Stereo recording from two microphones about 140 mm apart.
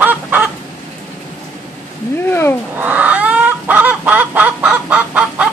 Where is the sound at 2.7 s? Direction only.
10° right (ahead or behind).